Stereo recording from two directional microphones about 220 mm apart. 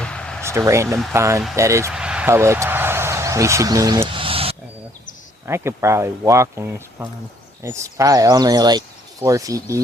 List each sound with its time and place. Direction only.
0.0 s a sound: 5° left (ahead or behind)
0.4 s speech: 15° right (ahead or behind)
5.5 s speech: 10° right (ahead or behind)